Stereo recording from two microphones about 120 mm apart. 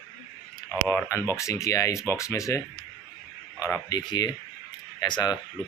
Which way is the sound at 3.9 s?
35° left (ahead or behind).